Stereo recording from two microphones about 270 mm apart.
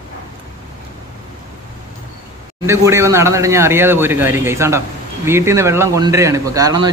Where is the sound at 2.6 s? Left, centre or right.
Centre.